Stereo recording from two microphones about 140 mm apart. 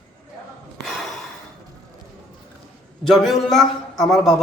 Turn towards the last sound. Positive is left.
turn(degrees=0)  # may be behind; listen again after turning